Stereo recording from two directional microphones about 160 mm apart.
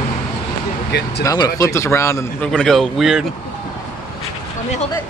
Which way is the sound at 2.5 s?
5° left (ahead or behind).